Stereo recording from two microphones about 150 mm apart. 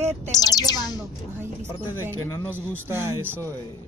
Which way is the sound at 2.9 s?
15° right (ahead or behind).